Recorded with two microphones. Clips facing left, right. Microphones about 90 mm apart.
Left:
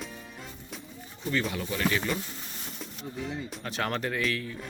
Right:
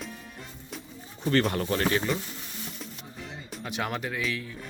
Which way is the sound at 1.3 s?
55° right (ahead or behind).